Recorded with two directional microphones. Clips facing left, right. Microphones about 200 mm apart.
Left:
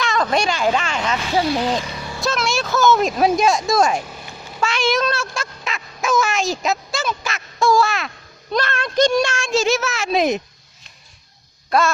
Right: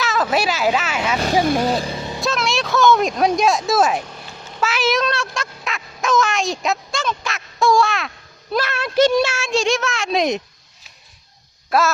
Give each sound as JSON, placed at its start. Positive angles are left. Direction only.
{"t": 0.0, "sound": "speech", "side_deg": -5}
{"t": 1.8, "sound": "a sound", "side_deg": -25}
{"t": 2.2, "sound": "speech", "side_deg": 0}
{"t": 4.7, "sound": "a sound", "side_deg": -5}
{"t": 8.5, "sound": "speech", "side_deg": -5}
{"t": 11.7, "sound": "speech", "side_deg": -5}